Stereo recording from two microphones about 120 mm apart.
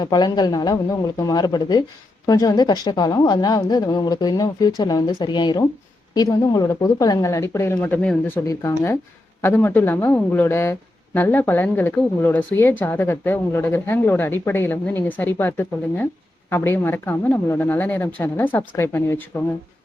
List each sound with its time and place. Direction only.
0.0 s a woman's voice: 35° left (ahead or behind); by 8.1 s 15° left (ahead or behind)
8.4 s a woman's voice: 25° left (ahead or behind)